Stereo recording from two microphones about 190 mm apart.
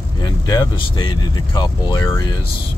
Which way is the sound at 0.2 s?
20° left (ahead or behind).